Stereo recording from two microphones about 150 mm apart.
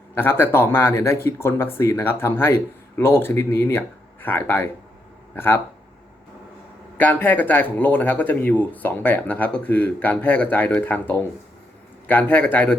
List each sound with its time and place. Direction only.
0.1 s speech: 15° left (ahead or behind)
6.9 s speech: 10° left (ahead or behind)